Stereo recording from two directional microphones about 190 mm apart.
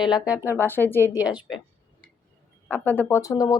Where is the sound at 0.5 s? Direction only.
10° left (ahead or behind).